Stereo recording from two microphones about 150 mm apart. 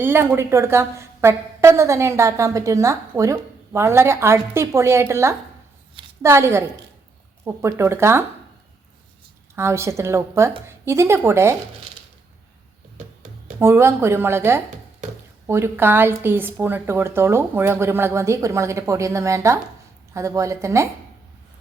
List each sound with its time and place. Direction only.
0.0 s a woman's voice: 15° right (ahead or behind)
9.6 s a woman's voice: 20° right (ahead or behind)
13.6 s a woman's voice: 15° right (ahead or behind)